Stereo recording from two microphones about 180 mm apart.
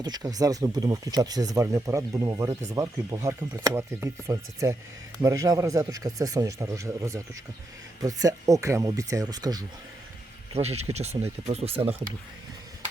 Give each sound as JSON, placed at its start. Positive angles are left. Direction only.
{"t": 0.0, "sound": "speech", "side_deg": -20}
{"t": 10.5, "sound": "speech", "side_deg": -35}